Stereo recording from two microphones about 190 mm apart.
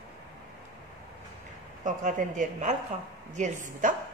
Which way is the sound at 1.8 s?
40° right (ahead or behind).